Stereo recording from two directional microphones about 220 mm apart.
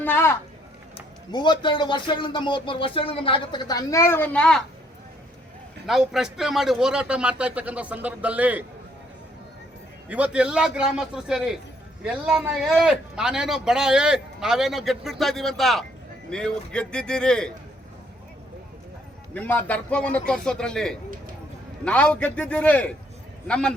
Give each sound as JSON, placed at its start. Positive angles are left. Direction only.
{"t": 0.0, "sound": "a sound", "side_deg": 10}
{"t": 1.3, "sound": "speech", "side_deg": 20}
{"t": 5.8, "sound": "a man's voice", "side_deg": 0}
{"t": 10.1, "sound": "a man's voice", "side_deg": -5}
{"t": 19.3, "sound": "a man's voice", "side_deg": 5}